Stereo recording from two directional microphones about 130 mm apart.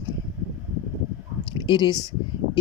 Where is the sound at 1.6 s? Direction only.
35° left (ahead or behind).